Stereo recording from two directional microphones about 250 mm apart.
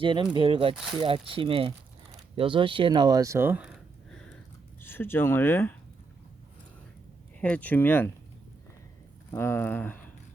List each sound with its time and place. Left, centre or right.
0.0 s speech: centre
7.4 s speech: centre
9.3 s speech: centre